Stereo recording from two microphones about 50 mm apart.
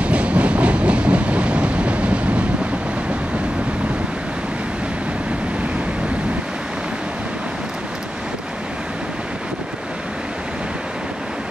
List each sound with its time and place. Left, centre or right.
0.0 s train: right